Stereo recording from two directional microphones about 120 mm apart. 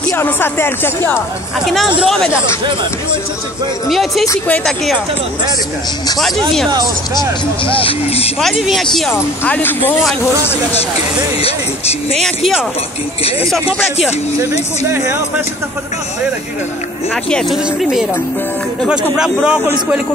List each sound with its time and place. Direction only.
0.1 s speech: 20° left (ahead or behind)
2.0 s speech: 5° left (ahead or behind)
3.9 s speech: centre (ahead or behind)
6.1 s speech: centre (ahead or behind)
7.2 s speech: 45° left (ahead or behind)
8.4 s speech: centre (ahead or behind)
9.1 s speech: 15° left (ahead or behind)
17.1 s a man's voice: 5° left (ahead or behind)